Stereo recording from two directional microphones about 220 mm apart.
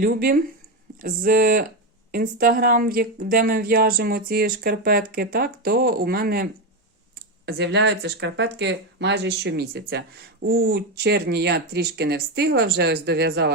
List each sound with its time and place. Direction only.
0.0 s a woman's voice: 45° right (ahead or behind)